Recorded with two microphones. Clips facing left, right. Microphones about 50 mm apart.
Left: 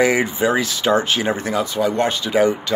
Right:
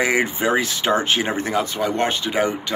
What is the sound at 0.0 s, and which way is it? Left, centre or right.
Speech, right.